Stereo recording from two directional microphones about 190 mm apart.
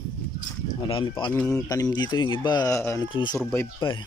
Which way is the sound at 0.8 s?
25° left (ahead or behind).